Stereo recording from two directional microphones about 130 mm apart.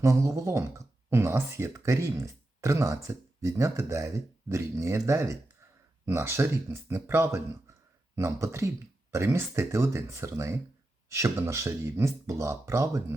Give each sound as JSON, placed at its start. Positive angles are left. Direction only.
{"t": 0.0, "sound": "speech", "side_deg": -25}